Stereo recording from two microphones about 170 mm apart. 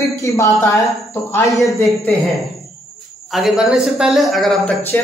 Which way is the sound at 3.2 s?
Centre (ahead or behind).